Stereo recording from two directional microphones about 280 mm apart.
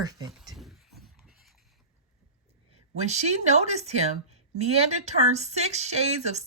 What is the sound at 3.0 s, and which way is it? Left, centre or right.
Speech, right.